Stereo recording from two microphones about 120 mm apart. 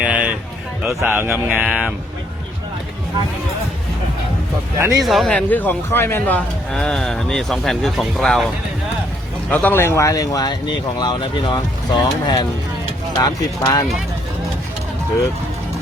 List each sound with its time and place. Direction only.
0.0 s a sound: 10° right (ahead or behind)
0.8 s a man's voice: centre (ahead or behind)
1.0 s mantra: 15° right (ahead or behind)
5.0 s speech: centre (ahead or behind)
9.5 s speech: 15° left (ahead or behind); by 12.5 s 35° left (ahead or behind)
13.1 s speech: 25° left (ahead or behind)